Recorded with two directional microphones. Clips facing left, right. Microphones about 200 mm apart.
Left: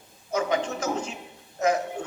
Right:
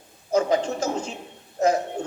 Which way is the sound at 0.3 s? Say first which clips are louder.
Right 4 dB; 30° right (ahead or behind).